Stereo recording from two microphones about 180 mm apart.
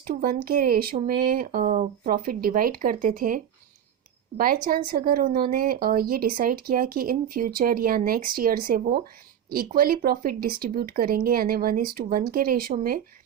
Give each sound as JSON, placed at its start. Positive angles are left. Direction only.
{"t": 0.1, "sound": "speech", "side_deg": -55}